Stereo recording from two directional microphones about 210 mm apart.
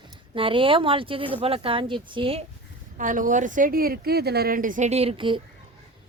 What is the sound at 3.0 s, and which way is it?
Speech, 40° right (ahead or behind).